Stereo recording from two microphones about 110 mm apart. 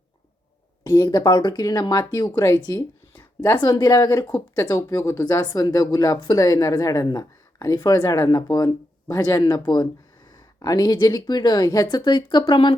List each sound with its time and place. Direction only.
0.9 s speech: 30° left (ahead or behind)
3.7 s speech: 40° left (ahead or behind)